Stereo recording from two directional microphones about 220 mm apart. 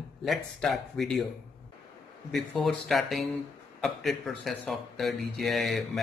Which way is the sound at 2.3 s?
Centre (ahead or behind).